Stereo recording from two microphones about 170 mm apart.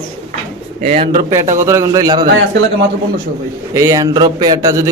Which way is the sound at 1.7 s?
20° right (ahead or behind).